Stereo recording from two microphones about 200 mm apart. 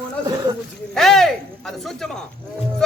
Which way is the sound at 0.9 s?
Centre (ahead or behind).